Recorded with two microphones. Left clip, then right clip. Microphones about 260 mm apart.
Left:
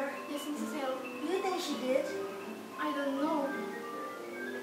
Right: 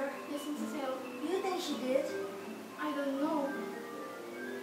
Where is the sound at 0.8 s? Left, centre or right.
Centre.